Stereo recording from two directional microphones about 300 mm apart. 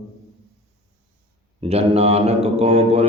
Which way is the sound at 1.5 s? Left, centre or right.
Right.